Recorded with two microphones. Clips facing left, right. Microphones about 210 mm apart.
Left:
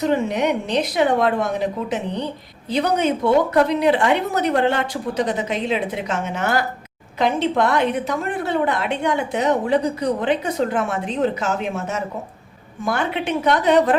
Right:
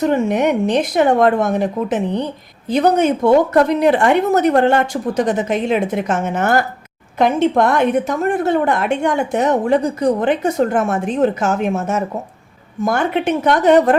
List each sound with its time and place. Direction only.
0.0 s a woman's voice: 50° right (ahead or behind)